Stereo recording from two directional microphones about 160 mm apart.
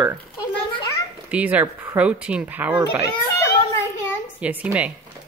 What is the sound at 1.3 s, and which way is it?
A child's voice, 10° right (ahead or behind).